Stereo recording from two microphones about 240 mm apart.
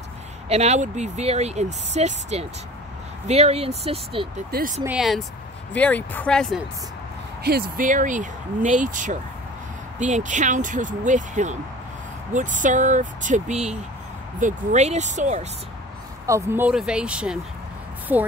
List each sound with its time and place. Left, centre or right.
0.5 s speech: right
4.5 s speech: right
4.8 s speech: centre
7.4 s speech: right
16.3 s a woman's voice: centre